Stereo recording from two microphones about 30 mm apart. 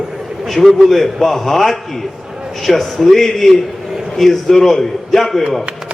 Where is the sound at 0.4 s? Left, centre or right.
Centre.